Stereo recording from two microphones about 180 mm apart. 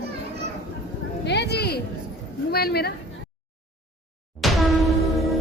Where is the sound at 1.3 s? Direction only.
65° left (ahead or behind).